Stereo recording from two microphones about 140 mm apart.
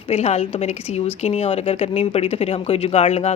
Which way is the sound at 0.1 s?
50° left (ahead or behind).